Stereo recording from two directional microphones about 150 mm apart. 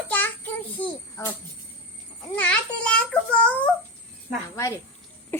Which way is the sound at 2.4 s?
10° left (ahead or behind).